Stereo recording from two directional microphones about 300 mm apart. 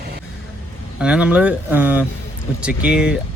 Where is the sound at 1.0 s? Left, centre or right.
Centre.